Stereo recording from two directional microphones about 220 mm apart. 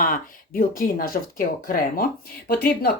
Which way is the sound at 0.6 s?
40° left (ahead or behind).